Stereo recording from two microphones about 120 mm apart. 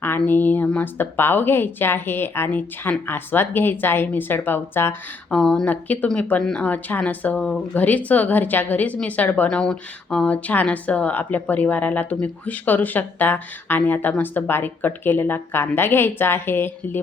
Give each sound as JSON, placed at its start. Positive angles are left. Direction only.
{"t": 0.3, "sound": "speech", "side_deg": 15}
{"t": 5.3, "sound": "speech", "side_deg": 5}